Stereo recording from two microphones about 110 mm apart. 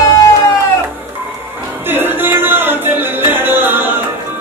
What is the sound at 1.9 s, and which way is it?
Music, 20° right (ahead or behind).